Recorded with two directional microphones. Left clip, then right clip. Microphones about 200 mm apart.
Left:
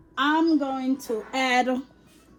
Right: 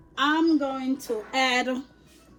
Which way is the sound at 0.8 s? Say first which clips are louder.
Left 1 dB; 30° left (ahead or behind).